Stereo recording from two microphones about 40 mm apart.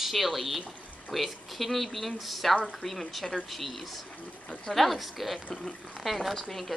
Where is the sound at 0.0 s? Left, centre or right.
Centre.